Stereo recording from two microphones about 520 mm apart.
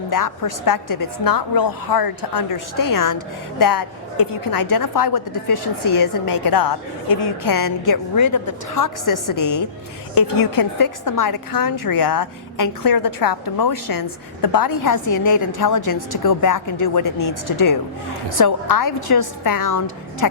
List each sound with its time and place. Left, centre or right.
0.1 s a woman's voice: left